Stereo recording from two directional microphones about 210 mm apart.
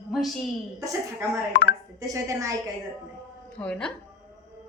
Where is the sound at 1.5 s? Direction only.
50° left (ahead or behind).